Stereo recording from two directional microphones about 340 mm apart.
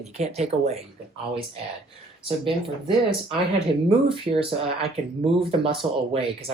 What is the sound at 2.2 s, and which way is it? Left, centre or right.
Speech, centre.